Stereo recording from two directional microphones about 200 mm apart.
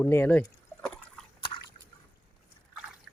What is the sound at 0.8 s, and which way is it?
Liquid, 5° left (ahead or behind).